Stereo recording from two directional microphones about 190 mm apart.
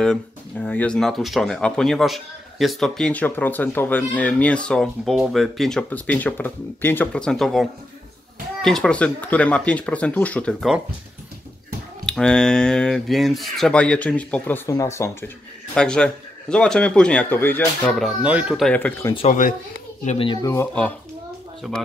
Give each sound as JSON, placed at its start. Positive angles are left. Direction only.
{"t": 0.0, "sound": "speech", "side_deg": 5}
{"t": 8.6, "sound": "speech", "side_deg": 5}
{"t": 12.1, "sound": "speech", "side_deg": 5}
{"t": 18.7, "sound": "speech", "side_deg": 10}
{"t": 19.1, "sound": "speech", "side_deg": 40}
{"t": 20.4, "sound": "speech", "side_deg": 10}